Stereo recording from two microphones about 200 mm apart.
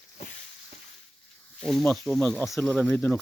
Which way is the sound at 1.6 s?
Centre (ahead or behind).